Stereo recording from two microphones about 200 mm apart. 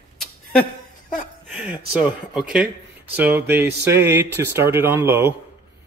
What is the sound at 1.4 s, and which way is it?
Speech, centre (ahead or behind).